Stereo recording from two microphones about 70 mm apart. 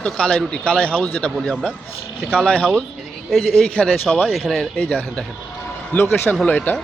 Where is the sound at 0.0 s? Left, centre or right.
Centre.